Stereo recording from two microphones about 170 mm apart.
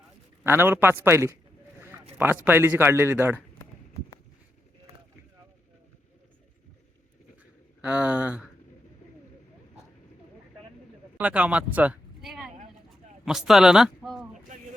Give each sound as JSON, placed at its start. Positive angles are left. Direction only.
{"t": 0.4, "sound": "a man's voice", "side_deg": -15}
{"t": 7.8, "sound": "a man's voice", "side_deg": -5}
{"t": 11.2, "sound": "speech", "side_deg": -10}